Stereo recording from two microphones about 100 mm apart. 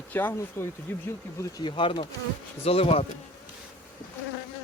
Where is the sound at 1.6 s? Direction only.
55° left (ahead or behind).